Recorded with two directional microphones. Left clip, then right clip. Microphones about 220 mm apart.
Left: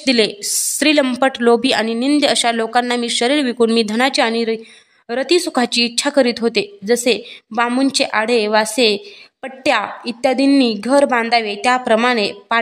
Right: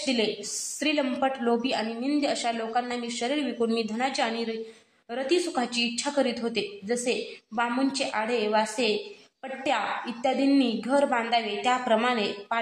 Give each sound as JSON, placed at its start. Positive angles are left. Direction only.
{"t": 0.0, "sound": "speech", "side_deg": 50}